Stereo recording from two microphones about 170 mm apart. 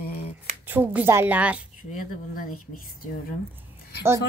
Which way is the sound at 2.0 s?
55° left (ahead or behind).